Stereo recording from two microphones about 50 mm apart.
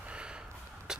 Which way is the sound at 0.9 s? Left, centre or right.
Centre.